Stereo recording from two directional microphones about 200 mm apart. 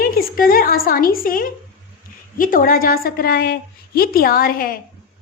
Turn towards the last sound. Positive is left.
turn(degrees=45)  # may be behind; listen again after turning